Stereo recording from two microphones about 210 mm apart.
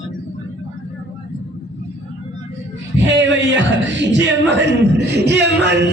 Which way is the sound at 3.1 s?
60° right (ahead or behind).